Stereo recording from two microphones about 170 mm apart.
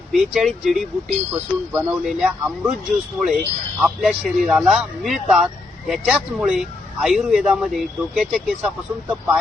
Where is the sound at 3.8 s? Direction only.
Centre (ahead or behind).